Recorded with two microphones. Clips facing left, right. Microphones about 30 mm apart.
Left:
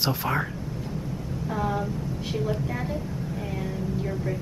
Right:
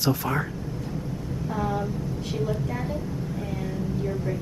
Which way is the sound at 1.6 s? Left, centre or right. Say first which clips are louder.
Even; centre.